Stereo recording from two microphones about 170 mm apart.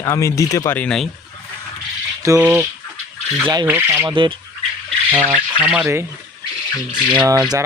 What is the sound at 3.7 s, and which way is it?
Mechanisms, 15° right (ahead or behind).